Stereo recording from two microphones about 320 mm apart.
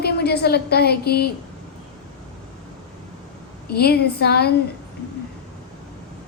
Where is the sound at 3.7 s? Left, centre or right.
Left.